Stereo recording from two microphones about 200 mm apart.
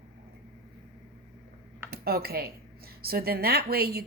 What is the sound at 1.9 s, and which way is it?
Speech, 50° right (ahead or behind).